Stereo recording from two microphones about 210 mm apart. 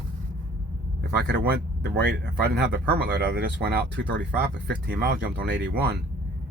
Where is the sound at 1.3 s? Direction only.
55° right (ahead or behind).